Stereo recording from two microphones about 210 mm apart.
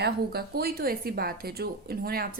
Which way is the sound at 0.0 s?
45° right (ahead or behind).